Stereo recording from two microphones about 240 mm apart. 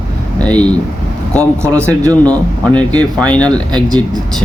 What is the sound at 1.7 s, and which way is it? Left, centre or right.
Speech, centre.